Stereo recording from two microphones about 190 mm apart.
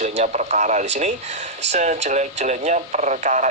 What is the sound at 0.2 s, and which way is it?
Speech, 40° right (ahead or behind).